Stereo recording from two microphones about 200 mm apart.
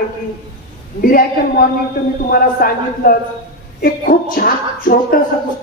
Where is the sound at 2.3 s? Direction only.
45° left (ahead or behind).